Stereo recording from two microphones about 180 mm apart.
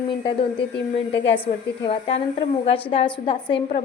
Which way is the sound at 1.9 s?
35° left (ahead or behind).